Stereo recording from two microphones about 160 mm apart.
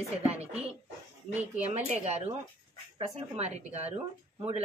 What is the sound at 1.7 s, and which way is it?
Speech, 45° right (ahead or behind).